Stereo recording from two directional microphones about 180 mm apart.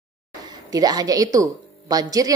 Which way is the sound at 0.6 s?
20° right (ahead or behind).